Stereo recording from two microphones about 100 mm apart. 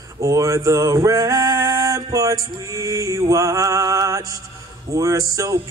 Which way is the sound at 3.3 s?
35° right (ahead or behind).